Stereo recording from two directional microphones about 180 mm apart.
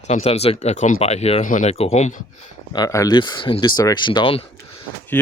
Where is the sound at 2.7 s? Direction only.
20° left (ahead or behind).